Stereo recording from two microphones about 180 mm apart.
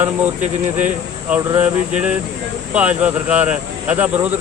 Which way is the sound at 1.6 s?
5° right (ahead or behind).